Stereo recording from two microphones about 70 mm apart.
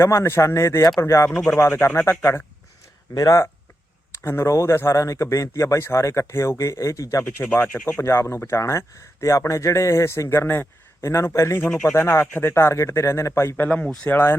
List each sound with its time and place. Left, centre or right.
0.0 s speech: left
0.8 s speech: left
1.0 s speech: left
1.3 s speech: centre
1.5 s speech: left
2.0 s speech: left
3.2 s speech: left
4.1 s speech: left
7.4 s speech: left
8.0 s speech: left
13.6 s speech: centre